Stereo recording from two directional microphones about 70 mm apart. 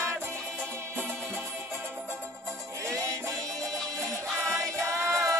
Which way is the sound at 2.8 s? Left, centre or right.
Right.